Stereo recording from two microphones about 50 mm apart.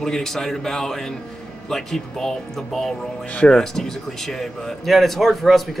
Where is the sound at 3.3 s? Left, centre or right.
Left.